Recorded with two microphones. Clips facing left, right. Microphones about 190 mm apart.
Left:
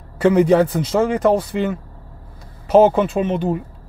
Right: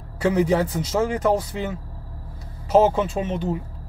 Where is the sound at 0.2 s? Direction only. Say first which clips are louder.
Left 6 dB; 65° left (ahead or behind).